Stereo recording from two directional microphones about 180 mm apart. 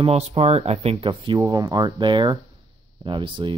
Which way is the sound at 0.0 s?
30° right (ahead or behind).